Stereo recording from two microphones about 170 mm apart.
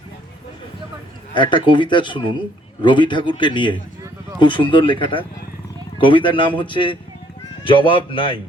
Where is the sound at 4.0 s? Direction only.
15° right (ahead or behind).